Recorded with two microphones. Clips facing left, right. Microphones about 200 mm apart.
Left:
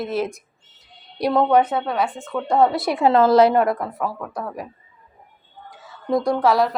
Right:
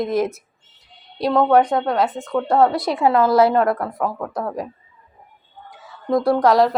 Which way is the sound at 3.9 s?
15° right (ahead or behind).